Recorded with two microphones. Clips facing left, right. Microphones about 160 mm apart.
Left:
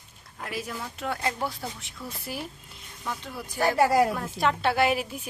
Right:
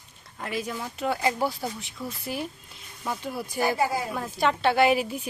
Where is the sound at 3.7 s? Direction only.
85° left.